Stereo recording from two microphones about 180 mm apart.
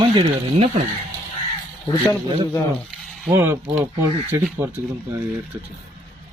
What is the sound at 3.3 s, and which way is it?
Speech, 15° right (ahead or behind).